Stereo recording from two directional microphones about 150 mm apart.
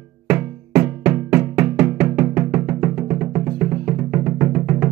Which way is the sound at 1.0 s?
15° right (ahead or behind).